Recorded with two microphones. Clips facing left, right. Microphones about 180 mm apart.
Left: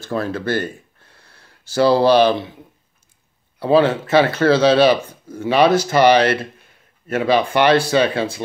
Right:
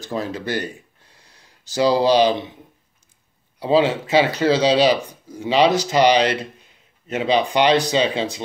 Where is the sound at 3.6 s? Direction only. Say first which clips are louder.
Left 3 dB; 15° right (ahead or behind).